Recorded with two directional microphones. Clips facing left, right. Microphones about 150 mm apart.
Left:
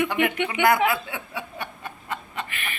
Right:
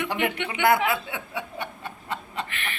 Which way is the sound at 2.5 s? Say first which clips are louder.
Even; 10° left (ahead or behind).